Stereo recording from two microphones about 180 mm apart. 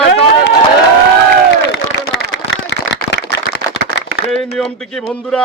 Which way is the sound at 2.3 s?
90° left.